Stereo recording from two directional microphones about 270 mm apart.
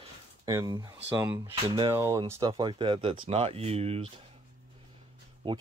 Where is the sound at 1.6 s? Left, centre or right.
Centre.